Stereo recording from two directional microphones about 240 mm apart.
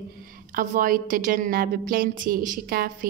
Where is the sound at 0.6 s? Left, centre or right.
Right.